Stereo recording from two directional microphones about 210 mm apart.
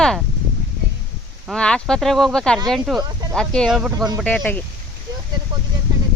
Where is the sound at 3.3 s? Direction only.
5° left (ahead or behind).